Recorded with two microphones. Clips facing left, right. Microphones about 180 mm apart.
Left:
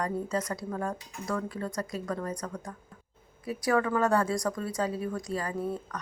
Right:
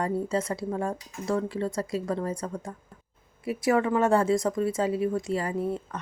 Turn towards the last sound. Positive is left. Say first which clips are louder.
# right 5 dB
turn(degrees=-25)  # may be behind; listen again after turning